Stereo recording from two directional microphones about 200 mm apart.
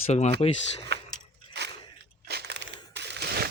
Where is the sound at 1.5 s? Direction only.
60° right (ahead or behind).